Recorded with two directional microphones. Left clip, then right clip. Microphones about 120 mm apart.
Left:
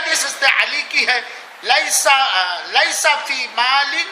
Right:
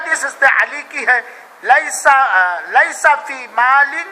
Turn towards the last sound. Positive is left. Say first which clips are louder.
# right 4 dB
turn(degrees=20)  # may be behind; listen again after turning